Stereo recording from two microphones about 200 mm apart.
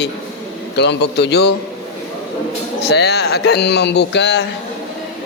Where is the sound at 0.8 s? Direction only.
55° left (ahead or behind).